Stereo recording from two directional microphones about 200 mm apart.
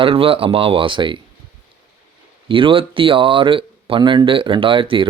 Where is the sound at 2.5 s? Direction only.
25° right (ahead or behind).